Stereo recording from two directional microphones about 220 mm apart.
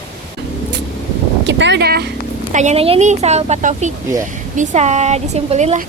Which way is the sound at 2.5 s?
30° right (ahead or behind).